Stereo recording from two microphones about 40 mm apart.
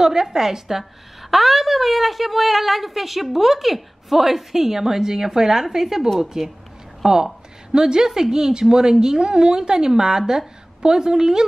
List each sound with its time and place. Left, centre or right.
0.0 s a woman's voice: centre